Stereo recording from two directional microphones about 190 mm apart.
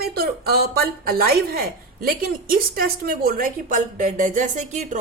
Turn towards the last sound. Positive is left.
turn(degrees=-40)  # may be behind; listen again after turning